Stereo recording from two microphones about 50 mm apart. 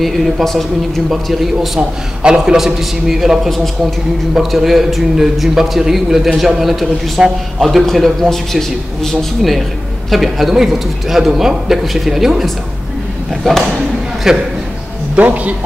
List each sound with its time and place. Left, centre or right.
0.0 s a man's voice: centre
1.8 s a man's voice: centre
14.3 s a man's voice: centre
15.1 s a man's voice: right